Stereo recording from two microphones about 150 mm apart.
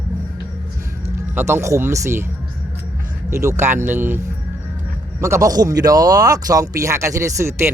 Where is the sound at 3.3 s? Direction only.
15° right (ahead or behind).